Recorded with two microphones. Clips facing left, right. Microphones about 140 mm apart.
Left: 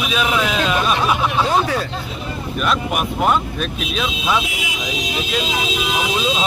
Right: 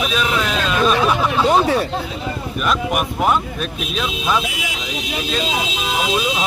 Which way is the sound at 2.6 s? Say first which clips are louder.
Even; centre (ahead or behind).